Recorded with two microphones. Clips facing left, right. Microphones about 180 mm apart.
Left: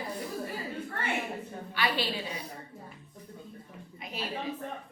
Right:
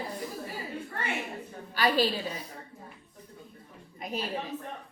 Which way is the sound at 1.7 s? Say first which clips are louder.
Right 5 dB; 40° right (ahead or behind).